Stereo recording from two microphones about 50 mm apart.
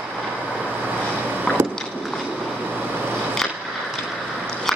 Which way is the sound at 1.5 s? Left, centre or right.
Left.